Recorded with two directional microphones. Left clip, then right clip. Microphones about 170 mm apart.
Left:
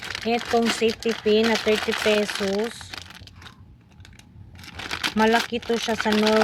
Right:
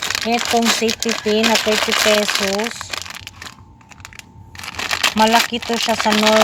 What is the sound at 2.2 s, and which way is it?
Speech, 25° right (ahead or behind).